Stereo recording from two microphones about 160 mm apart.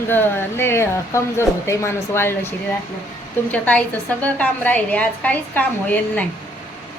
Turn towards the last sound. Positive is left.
turn(degrees=10)  # may be behind; listen again after turning